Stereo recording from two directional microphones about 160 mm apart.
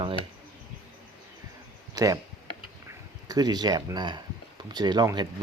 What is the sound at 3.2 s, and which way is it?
Speech, 25° right (ahead or behind).